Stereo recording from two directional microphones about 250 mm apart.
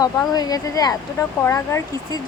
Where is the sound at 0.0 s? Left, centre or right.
Centre.